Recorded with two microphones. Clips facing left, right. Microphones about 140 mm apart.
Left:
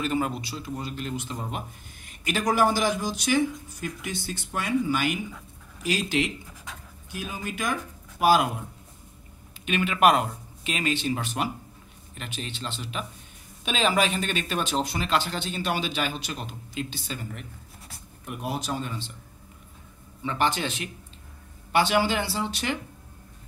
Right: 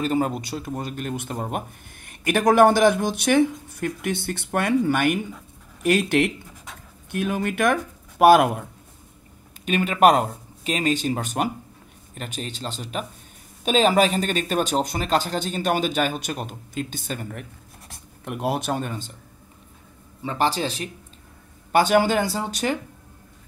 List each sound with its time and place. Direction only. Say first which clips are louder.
0.0 s speech: right 4 dB; 40° right (ahead or behind); by 8.6 s 60° right (ahead or behind)
9.7 s speech: right 4 dB; 40° right (ahead or behind)
18.2 s speech: right 6 dB; 65° right (ahead or behind); by 19.1 s 50° right (ahead or behind)
20.2 s speech: right 3 dB; 35° right (ahead or behind)